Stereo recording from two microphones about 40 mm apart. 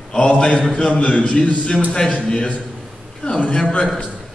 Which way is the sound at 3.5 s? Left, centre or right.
Left.